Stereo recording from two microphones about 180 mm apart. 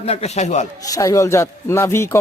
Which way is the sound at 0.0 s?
35° left (ahead or behind).